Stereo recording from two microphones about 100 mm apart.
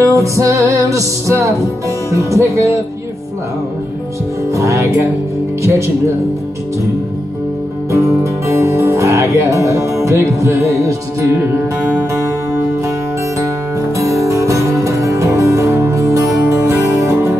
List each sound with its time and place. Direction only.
0.0 s music: 30° right (ahead or behind)
4.6 s music: 30° right (ahead or behind)
7.9 s music: 30° right (ahead or behind)
13.9 s music: 30° right (ahead or behind)